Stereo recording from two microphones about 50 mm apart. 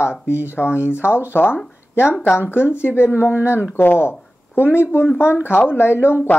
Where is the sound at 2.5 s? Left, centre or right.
Left.